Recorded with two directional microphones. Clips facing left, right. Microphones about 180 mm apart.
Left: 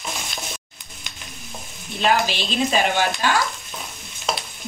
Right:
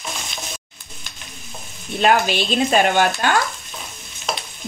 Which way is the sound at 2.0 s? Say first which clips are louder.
Right 3 dB; 55° right (ahead or behind).